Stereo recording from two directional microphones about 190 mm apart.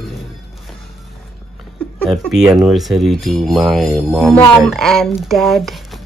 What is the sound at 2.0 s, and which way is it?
Speech, centre (ahead or behind).